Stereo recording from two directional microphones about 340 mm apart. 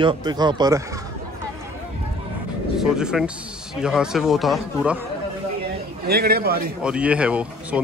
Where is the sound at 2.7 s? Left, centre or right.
Centre.